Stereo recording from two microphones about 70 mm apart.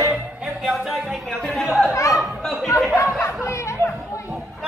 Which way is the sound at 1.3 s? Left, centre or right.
Centre.